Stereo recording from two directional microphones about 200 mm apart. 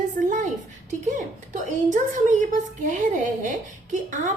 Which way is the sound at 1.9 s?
40° right (ahead or behind).